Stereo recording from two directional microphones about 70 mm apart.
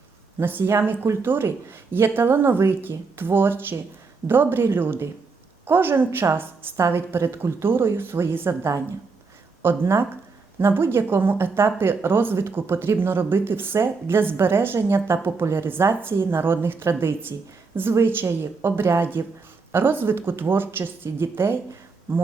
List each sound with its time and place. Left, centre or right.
0.3 s speech: right